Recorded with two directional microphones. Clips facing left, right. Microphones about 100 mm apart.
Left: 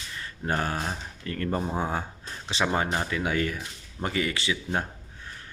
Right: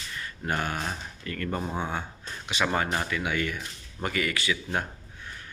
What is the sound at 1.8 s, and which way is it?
Speech, 35° left (ahead or behind).